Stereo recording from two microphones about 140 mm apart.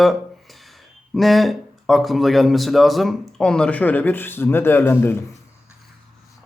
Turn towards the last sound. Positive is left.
turn(degrees=15)  # may be behind; listen again after turning